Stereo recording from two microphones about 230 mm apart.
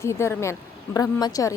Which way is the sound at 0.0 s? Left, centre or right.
Centre.